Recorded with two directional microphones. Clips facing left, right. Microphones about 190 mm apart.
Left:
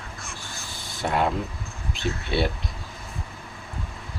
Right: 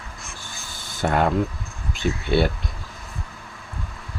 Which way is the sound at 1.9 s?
Centre (ahead or behind).